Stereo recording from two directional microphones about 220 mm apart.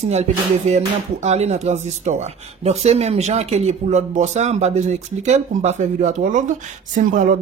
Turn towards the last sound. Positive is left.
turn(degrees=-35)  # may be behind; listen again after turning